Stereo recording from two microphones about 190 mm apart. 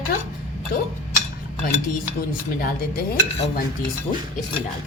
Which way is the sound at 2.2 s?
50° left (ahead or behind).